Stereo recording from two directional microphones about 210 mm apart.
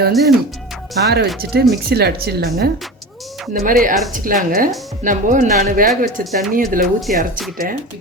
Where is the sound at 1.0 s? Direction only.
50° right (ahead or behind).